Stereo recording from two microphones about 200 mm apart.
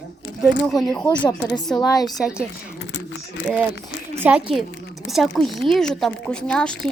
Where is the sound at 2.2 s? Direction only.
5° right (ahead or behind).